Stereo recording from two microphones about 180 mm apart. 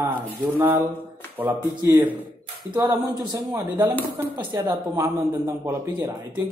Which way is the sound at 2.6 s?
25° right (ahead or behind).